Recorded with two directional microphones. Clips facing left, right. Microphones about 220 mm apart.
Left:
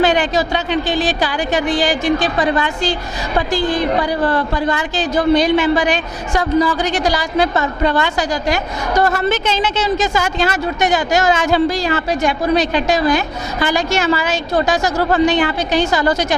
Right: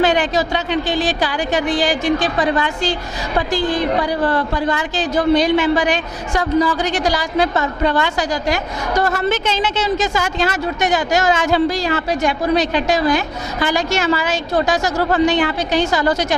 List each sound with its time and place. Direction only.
0.0 s a woman's voice: 15° left (ahead or behind)
14.9 s a woman's voice: 25° left (ahead or behind)